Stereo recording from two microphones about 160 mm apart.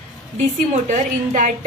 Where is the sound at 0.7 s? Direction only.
50° right (ahead or behind).